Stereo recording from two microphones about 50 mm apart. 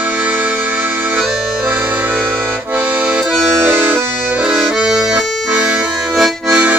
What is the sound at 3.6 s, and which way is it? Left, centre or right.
Accordion, right.